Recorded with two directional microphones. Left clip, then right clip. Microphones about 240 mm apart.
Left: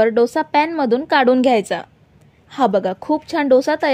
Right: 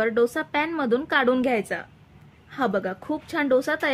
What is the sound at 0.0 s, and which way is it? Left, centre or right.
A woman's voice, left.